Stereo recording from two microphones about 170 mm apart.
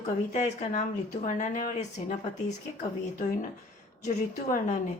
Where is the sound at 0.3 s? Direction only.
45° left (ahead or behind).